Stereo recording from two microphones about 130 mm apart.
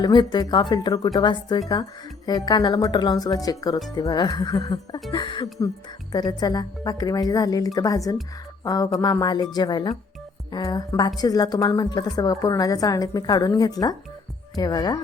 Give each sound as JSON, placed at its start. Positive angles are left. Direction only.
{"t": 0.0, "sound": "a woman's voice", "side_deg": 35}